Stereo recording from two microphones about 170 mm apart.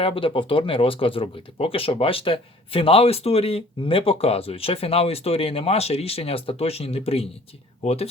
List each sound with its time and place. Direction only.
0.0 s speech: 30° left (ahead or behind)